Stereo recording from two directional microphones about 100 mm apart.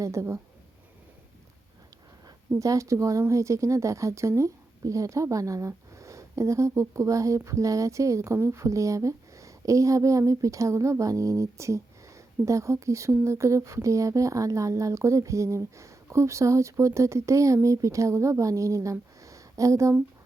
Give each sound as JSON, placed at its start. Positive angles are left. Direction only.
{"t": 0.0, "sound": "speech", "side_deg": -30}
{"t": 2.6, "sound": "speech", "side_deg": -30}